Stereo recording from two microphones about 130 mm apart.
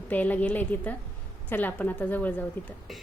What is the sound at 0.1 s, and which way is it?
A woman's voice, 10° left (ahead or behind).